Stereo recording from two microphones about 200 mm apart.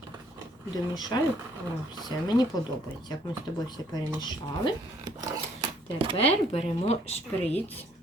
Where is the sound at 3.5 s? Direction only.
20° left (ahead or behind).